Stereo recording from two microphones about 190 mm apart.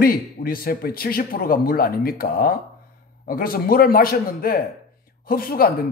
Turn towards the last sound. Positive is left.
turn(degrees=50)  # may be behind; listen again after turning